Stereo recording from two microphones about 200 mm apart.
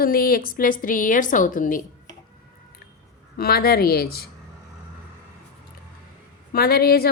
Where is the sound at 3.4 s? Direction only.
50° left (ahead or behind).